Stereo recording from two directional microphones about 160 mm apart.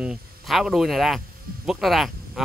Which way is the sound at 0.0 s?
5° right (ahead or behind).